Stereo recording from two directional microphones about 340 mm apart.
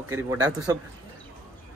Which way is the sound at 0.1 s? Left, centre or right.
Centre.